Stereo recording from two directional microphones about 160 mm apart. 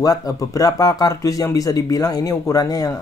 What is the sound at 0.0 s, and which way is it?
Speech, 25° left (ahead or behind).